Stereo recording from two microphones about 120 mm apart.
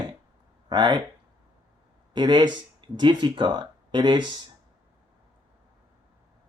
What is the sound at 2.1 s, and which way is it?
Speech, 40° right (ahead or behind).